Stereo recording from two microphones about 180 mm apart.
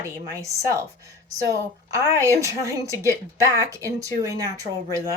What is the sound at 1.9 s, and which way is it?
A woman's voice, 15° right (ahead or behind).